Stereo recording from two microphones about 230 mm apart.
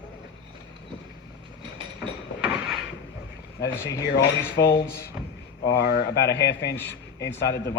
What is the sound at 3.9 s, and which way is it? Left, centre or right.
Speech, left.